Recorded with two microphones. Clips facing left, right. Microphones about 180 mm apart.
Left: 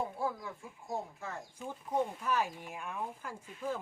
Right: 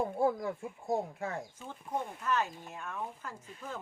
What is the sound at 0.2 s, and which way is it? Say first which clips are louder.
Speech: right 7 dB; 55° right (ahead or behind).